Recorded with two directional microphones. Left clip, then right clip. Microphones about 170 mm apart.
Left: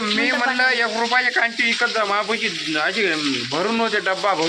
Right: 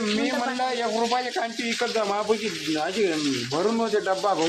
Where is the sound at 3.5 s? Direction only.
15° left (ahead or behind).